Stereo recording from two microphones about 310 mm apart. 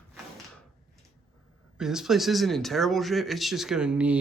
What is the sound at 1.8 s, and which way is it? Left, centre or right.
Speech, centre.